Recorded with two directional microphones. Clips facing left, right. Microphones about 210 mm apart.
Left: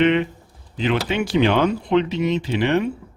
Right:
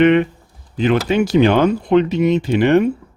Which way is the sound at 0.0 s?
55° right (ahead or behind).